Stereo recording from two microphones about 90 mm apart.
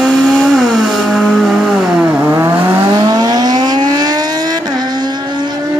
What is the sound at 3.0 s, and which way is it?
Vehicle, 45° right (ahead or behind).